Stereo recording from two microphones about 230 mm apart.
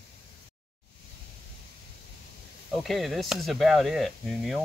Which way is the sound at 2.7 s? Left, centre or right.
Centre.